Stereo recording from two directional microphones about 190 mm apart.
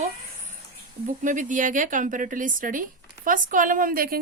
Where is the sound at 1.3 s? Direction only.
45° right (ahead or behind).